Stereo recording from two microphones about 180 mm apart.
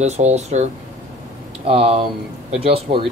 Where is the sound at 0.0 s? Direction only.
40° right (ahead or behind).